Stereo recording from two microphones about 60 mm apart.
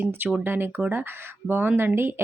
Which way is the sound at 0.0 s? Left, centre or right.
Right.